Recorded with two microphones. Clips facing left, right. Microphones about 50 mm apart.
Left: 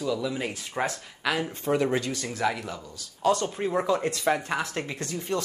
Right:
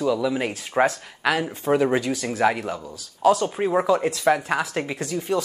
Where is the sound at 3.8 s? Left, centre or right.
Centre.